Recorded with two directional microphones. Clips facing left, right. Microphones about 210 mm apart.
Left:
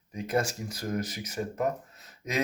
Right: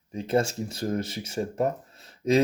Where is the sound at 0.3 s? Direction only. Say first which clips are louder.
Right 4 dB; 25° right (ahead or behind).